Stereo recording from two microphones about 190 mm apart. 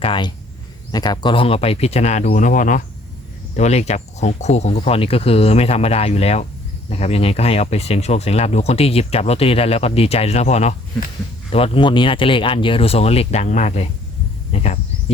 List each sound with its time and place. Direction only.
0.0 s speech: 25° left (ahead or behind)